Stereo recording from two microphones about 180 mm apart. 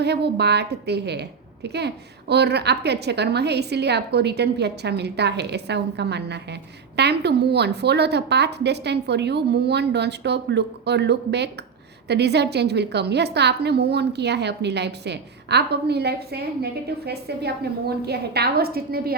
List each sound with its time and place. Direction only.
0.0 s a woman's voice: 65° right (ahead or behind)